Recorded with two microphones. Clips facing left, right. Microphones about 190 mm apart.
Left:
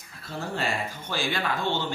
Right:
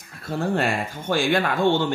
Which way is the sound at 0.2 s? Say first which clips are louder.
Right 8 dB; 50° right (ahead or behind).